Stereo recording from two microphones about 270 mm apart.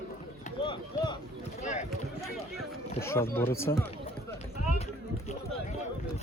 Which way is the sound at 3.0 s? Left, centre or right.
Centre.